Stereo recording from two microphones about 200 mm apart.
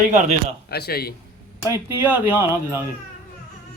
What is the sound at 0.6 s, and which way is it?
Speech, 55° left (ahead or behind).